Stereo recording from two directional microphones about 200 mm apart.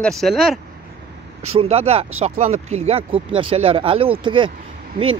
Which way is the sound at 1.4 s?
30° right (ahead or behind).